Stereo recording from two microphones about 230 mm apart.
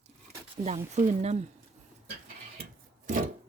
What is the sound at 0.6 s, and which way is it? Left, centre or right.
Speech, right.